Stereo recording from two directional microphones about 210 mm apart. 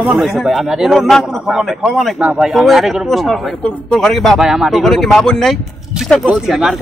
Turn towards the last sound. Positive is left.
turn(degrees=0)  # may be behind; listen again after turning